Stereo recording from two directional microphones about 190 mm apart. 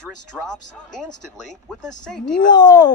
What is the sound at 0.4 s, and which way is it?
Speech, 5° left (ahead or behind).